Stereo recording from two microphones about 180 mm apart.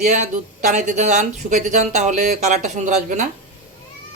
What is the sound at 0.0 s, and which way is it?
Speech, 40° right (ahead or behind).